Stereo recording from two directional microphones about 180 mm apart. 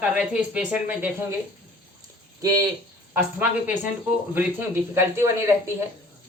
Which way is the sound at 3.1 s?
10° right (ahead or behind).